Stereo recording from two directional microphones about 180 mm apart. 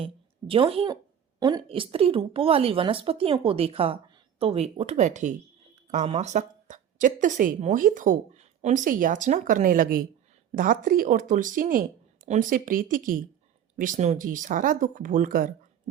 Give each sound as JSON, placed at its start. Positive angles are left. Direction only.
{"t": 0.0, "sound": "a woman's voice", "side_deg": -30}